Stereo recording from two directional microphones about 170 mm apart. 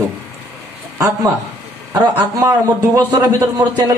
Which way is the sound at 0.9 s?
20° right (ahead or behind).